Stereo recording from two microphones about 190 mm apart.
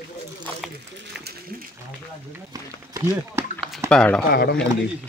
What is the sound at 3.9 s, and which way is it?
Speech, 5° left (ahead or behind).